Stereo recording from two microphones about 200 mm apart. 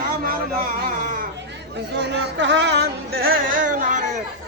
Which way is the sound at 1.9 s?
60° right (ahead or behind).